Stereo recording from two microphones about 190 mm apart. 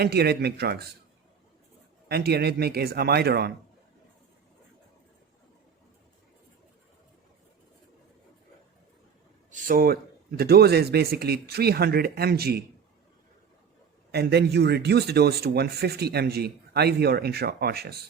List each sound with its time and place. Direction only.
0.0 s speech: 55° right (ahead or behind)
2.0 s speech: 55° right (ahead or behind)
9.5 s speech: 45° right (ahead or behind)
14.1 s speech: 60° right (ahead or behind)